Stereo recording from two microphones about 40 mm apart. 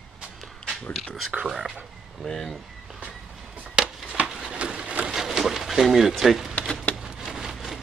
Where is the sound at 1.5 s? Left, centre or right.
Centre.